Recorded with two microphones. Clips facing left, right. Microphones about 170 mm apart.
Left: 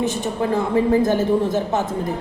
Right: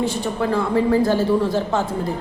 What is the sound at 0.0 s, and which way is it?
A woman's voice, 20° left (ahead or behind).